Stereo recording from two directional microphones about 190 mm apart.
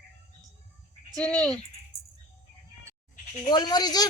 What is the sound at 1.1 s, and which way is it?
Speech, 5° left (ahead or behind).